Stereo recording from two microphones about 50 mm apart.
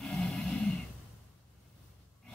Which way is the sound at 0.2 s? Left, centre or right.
Centre.